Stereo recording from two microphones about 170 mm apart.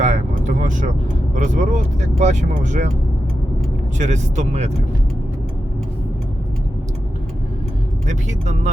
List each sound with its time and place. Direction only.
0.0 s vehicle: 45° right (ahead or behind)
1.4 s speech: 45° right (ahead or behind)
3.9 s speech: 45° right (ahead or behind)
8.0 s speech: 45° right (ahead or behind)